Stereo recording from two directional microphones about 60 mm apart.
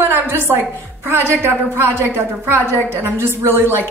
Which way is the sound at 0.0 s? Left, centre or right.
Right.